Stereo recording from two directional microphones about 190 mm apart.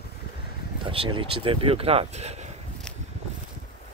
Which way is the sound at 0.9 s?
25° right (ahead or behind).